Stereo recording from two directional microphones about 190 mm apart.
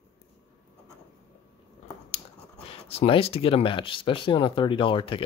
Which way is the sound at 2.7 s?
30° left (ahead or behind).